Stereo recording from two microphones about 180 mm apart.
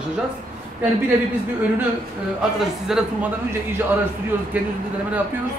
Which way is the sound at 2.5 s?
5° right (ahead or behind).